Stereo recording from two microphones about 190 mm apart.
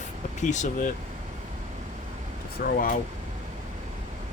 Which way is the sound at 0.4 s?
40° left (ahead or behind).